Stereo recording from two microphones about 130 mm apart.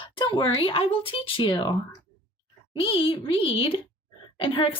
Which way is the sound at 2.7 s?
45° left (ahead or behind).